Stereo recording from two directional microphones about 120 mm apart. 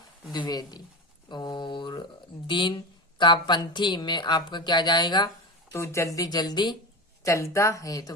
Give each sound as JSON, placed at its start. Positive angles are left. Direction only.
{"t": 0.3, "sound": "speech", "side_deg": 35}
{"t": 5.7, "sound": "speech", "side_deg": 25}
{"t": 7.3, "sound": "speech", "side_deg": 25}